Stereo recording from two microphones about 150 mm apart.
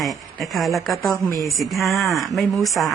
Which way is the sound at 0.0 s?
Centre (ahead or behind).